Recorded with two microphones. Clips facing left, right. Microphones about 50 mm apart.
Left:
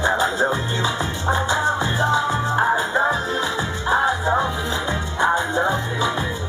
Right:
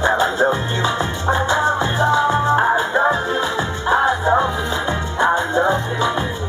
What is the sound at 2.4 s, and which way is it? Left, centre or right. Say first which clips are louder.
Music: right 3 dB; right.